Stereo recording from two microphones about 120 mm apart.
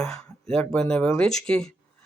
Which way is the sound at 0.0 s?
5° left (ahead or behind).